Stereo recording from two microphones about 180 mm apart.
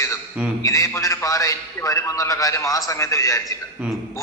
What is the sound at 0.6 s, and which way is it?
A man's voice, 20° left (ahead or behind).